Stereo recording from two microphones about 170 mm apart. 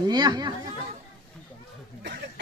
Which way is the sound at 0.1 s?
25° right (ahead or behind).